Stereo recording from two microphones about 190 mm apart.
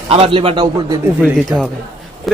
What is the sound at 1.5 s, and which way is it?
Speech, 10° right (ahead or behind).